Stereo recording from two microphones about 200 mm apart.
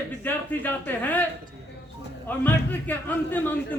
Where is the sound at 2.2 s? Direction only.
10° left (ahead or behind).